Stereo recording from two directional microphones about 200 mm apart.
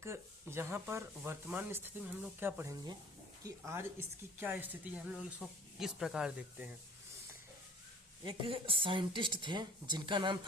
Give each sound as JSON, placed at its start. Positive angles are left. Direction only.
{"t": 0.0, "sound": "speech", "side_deg": -15}
{"t": 8.2, "sound": "speech", "side_deg": -25}